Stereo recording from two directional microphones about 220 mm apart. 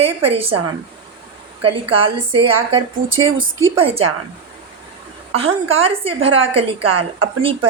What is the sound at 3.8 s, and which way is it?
Speech, 25° right (ahead or behind).